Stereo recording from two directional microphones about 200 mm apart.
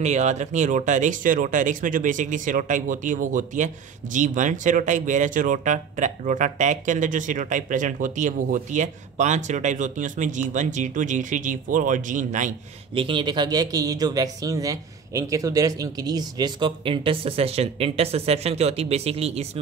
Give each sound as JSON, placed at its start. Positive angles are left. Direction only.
{"t": 0.0, "sound": "speech", "side_deg": -35}
{"t": 13.0, "sound": "speech", "side_deg": -25}